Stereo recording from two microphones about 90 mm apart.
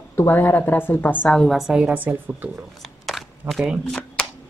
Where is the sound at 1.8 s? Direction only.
20° right (ahead or behind).